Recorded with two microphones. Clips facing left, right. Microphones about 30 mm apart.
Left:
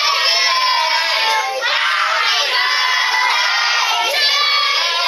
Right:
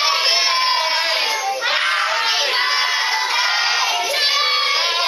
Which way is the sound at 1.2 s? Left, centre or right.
Left.